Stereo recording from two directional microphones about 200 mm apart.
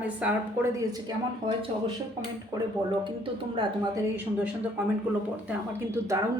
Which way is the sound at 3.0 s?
25° right (ahead or behind).